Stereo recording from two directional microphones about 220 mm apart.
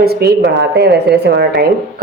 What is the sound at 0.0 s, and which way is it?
A woman's voice, 45° right (ahead or behind).